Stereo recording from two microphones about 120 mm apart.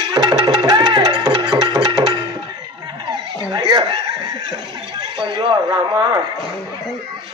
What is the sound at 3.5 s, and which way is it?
Snicker, 35° right (ahead or behind).